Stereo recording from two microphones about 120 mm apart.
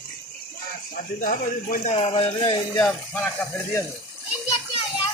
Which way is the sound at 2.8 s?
10° left (ahead or behind).